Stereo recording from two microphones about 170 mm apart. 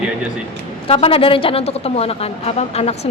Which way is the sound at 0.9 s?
35° left (ahead or behind).